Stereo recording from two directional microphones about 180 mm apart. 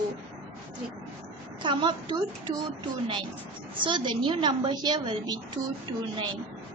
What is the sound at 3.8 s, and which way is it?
A woman's voice, 25° right (ahead or behind).